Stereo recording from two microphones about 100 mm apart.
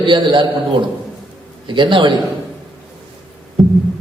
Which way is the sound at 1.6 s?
55° right (ahead or behind).